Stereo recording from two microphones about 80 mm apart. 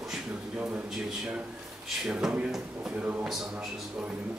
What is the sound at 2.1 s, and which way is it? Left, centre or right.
Speech, centre.